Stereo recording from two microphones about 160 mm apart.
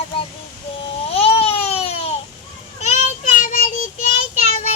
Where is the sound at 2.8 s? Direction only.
50° left (ahead or behind).